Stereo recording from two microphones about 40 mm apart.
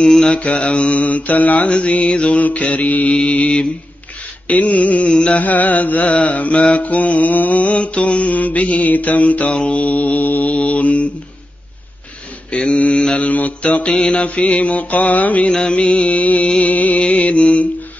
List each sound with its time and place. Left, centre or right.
0.0 s mantra: centre
0.3 s mantra: left
1.7 s mantra: left
4.7 s mantra: left
5.1 s music: left
5.4 s mantra: left
12.4 s mantra: left
15.5 s mantra: left